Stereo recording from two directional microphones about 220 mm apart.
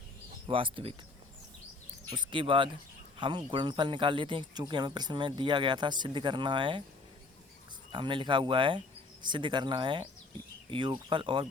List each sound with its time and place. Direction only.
0.4 s speech: 25° right (ahead or behind)
2.0 s speech: 25° right (ahead or behind)
7.9 s speech: 20° right (ahead or behind)